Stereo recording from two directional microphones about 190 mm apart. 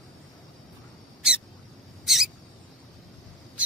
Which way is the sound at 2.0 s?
Centre (ahead or behind).